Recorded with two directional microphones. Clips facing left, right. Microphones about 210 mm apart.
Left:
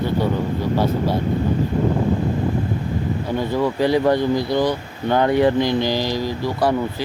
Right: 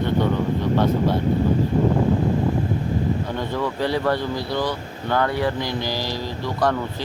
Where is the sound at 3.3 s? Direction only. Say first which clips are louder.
Left 5 dB; 10° left (ahead or behind).